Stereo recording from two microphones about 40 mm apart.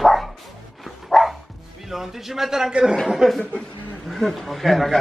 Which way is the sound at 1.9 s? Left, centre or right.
Centre.